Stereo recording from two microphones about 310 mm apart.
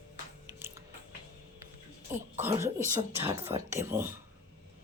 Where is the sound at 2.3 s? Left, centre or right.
Centre.